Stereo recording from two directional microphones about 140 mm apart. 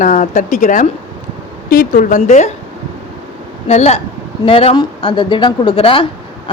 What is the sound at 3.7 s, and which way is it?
Speech, 50° left (ahead or behind).